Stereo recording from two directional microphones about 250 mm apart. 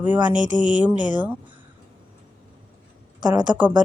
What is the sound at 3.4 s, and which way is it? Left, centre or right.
Speech, centre.